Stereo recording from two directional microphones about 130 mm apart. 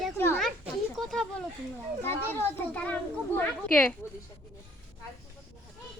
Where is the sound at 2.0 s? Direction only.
15° left (ahead or behind).